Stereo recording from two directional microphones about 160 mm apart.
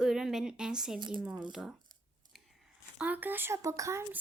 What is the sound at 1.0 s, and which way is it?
Speech, 30° right (ahead or behind).